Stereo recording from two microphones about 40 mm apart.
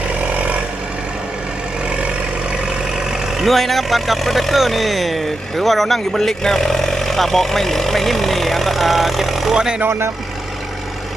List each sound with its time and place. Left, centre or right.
0.2 s vehicle: right
3.3 s speech: centre
9.6 s speech: right
9.8 s speech: right